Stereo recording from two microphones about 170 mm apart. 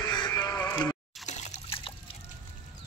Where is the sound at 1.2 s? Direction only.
45° left (ahead or behind).